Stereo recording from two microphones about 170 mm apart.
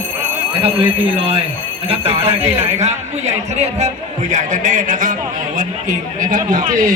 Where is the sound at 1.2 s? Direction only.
35° right (ahead or behind).